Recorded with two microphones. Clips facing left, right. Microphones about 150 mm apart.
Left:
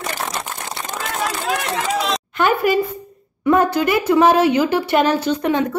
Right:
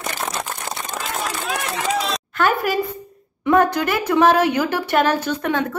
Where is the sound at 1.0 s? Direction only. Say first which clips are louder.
Left 4 dB; 75° left (ahead or behind).